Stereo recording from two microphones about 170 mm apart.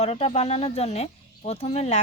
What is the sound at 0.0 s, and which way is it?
Speech, 35° left (ahead or behind).